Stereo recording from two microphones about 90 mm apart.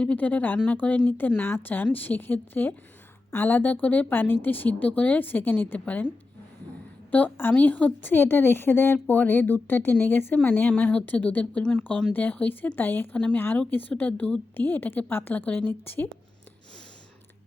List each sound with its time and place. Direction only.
0.0 s a woman's voice: 15° left (ahead or behind)
7.1 s a woman's voice: 20° left (ahead or behind)